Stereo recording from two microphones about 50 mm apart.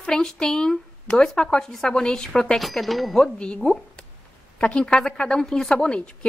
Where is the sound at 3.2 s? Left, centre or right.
Centre.